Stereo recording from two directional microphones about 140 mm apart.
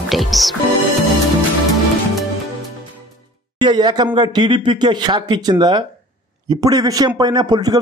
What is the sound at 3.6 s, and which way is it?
Speech, 30° right (ahead or behind).